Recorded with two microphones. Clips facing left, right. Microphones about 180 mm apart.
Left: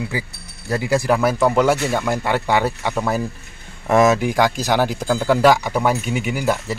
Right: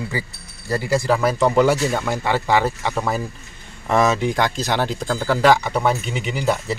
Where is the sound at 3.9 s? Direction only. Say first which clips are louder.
Left 3 dB; 10° left (ahead or behind).